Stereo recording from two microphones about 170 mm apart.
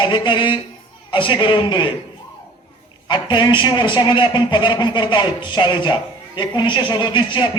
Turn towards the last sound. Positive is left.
turn(degrees=25)  # may be behind; listen again after turning